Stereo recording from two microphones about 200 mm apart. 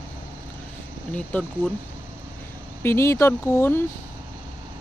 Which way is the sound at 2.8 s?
15° left (ahead or behind).